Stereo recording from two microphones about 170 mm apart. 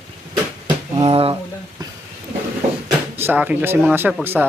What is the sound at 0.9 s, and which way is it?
Speech, 30° right (ahead or behind).